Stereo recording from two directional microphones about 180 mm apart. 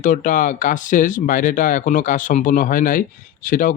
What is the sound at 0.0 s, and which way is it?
A man's voice, 45° left (ahead or behind).